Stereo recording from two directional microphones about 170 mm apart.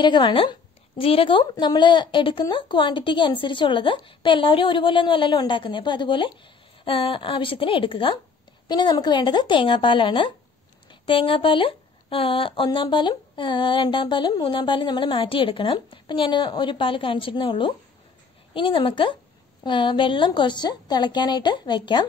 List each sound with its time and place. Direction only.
0.0 s a woman's voice: 25° left (ahead or behind)